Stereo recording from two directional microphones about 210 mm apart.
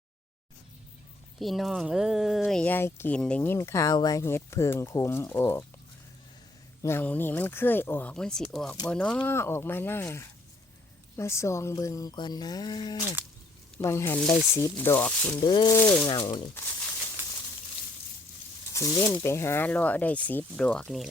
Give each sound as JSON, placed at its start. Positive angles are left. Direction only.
{"t": 1.4, "sound": "speech", "side_deg": 0}
{"t": 6.8, "sound": "speech", "side_deg": 10}
{"t": 15.4, "sound": "speech", "side_deg": 20}
{"t": 18.9, "sound": "speech", "side_deg": 15}